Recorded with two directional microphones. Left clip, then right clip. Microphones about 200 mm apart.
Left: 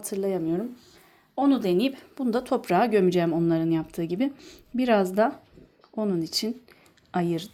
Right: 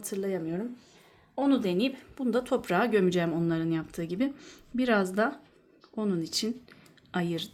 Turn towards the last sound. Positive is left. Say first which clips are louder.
# left 5 dB
turn(degrees=10)  # may be behind; listen again after turning